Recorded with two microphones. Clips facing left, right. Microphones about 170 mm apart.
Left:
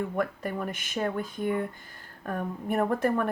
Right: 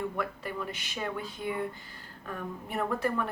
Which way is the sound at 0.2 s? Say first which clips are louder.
Left 5 dB; 45° left (ahead or behind).